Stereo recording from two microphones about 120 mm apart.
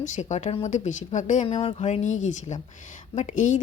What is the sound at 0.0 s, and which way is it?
Speech, 75° left (ahead or behind).